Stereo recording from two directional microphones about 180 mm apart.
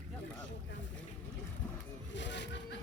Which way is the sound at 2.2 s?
80° left.